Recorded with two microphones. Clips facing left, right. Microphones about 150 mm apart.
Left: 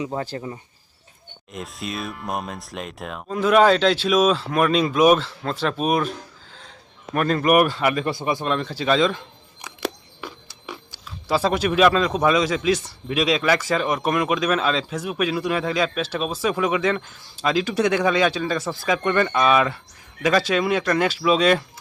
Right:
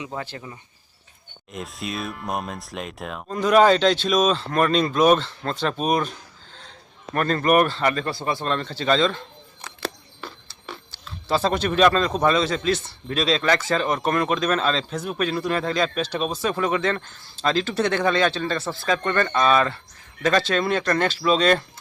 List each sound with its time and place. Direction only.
0.2 s speech: 35° left (ahead or behind)
1.5 s speech: centre (ahead or behind)